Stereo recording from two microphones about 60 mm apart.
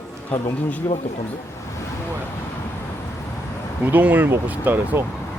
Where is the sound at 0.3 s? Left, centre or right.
Left.